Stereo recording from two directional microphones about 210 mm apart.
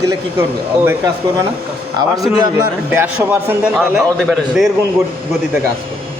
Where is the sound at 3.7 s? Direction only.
Centre (ahead or behind).